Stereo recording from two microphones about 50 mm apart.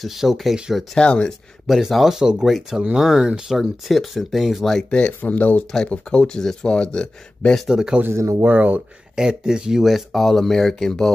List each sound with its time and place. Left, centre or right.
0.0 s speech: centre
0.9 s speech: centre
1.7 s speech: centre
3.8 s speech: centre
4.9 s speech: left
5.3 s speech: left
5.9 s speech: left
7.6 s speech: centre
8.2 s speech: right
8.5 s speech: right
9.1 s speech: centre